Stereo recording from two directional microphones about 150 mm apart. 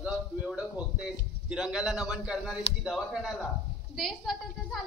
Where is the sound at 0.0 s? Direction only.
5° right (ahead or behind).